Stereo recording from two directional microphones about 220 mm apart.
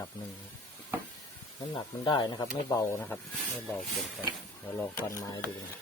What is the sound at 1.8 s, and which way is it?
Speech, 20° left (ahead or behind).